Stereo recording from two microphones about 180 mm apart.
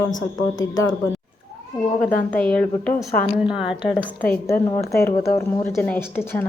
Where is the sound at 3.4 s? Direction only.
5° right (ahead or behind).